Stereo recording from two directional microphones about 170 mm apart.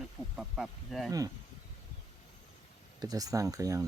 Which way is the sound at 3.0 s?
20° right (ahead or behind).